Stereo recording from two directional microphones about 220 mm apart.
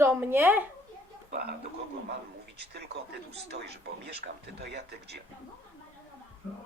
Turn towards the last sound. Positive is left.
turn(degrees=-50)  # may be behind; listen again after turning